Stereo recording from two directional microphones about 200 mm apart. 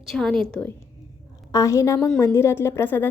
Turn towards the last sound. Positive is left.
turn(degrees=10)  # may be behind; listen again after turning